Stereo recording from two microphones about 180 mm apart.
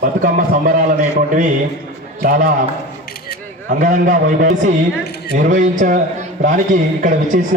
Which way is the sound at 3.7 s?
45° right (ahead or behind).